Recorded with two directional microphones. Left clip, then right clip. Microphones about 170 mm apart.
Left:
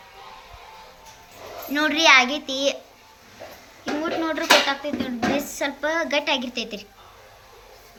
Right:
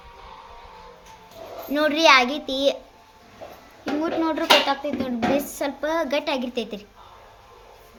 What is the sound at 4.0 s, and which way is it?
Speech, 50° right (ahead or behind).